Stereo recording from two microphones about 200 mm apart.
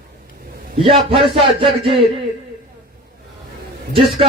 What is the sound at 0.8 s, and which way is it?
A man's voice, 25° right (ahead or behind).